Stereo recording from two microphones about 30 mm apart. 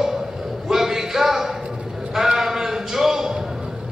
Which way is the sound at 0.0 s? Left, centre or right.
Centre.